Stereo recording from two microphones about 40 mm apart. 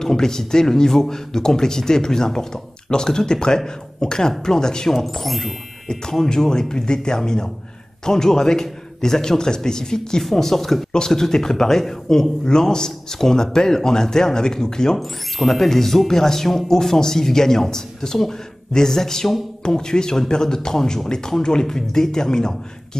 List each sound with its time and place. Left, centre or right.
0.0 s speech: centre
5.2 s speech: centre
6.2 s speech: centre
10.9 s speech: centre
15.0 s speech: centre